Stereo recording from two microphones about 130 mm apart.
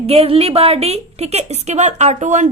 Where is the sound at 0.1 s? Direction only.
50° right (ahead or behind).